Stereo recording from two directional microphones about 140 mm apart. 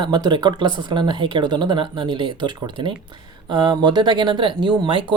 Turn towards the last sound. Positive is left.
turn(degrees=-35)  # may be behind; listen again after turning